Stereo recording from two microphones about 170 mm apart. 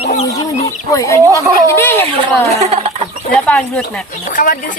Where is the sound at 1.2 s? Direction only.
20° right (ahead or behind).